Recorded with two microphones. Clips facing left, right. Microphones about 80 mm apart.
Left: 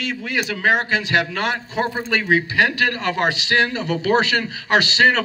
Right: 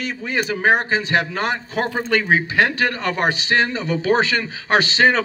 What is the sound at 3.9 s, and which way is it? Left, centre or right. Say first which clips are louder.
A man's voice: even; right.